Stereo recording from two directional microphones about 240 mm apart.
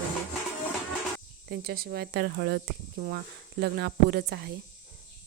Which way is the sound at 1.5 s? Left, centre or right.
Right.